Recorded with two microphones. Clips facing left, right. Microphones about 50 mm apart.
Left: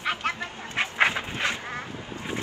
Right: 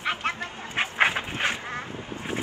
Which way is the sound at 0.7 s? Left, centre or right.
Right.